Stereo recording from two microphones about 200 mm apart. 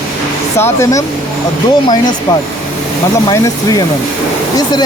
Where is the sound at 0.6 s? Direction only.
10° left (ahead or behind).